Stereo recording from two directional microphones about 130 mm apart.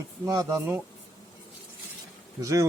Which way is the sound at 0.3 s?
25° right (ahead or behind).